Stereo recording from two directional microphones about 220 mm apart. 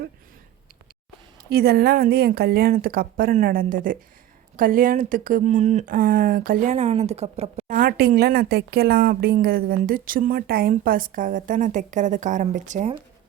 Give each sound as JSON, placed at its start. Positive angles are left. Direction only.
{"t": 1.5, "sound": "speech", "side_deg": -45}